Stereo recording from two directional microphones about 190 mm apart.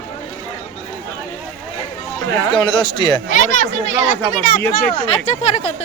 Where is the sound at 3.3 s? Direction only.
40° left (ahead or behind).